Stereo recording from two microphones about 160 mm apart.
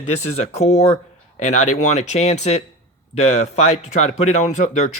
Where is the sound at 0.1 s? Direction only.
40° left (ahead or behind).